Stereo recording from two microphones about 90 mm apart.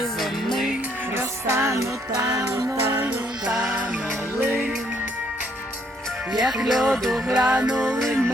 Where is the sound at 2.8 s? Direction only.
25° right (ahead or behind).